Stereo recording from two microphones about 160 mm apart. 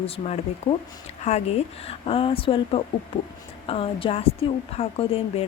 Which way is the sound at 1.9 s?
35° left (ahead or behind).